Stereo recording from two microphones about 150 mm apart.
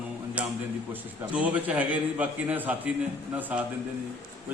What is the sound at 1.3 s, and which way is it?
A man's voice, 10° right (ahead or behind).